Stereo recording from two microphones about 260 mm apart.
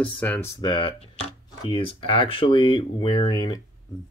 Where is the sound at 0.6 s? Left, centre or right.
Centre.